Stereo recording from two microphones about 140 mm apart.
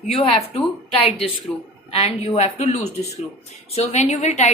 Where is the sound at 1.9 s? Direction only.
45° left (ahead or behind).